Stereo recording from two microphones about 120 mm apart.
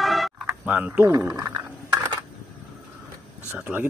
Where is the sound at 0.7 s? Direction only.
10° right (ahead or behind).